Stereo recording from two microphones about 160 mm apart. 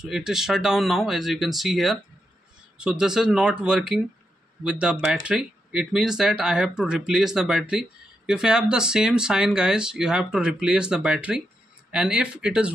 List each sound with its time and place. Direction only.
0.0 s speech: 5° right (ahead or behind)